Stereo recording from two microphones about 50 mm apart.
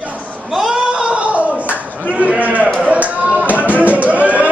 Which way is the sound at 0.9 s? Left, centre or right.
Right.